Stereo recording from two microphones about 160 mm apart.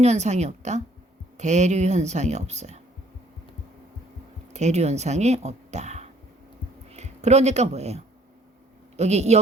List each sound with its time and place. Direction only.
0.0 s speech: 45° right (ahead or behind)
4.5 s speech: 45° right (ahead or behind)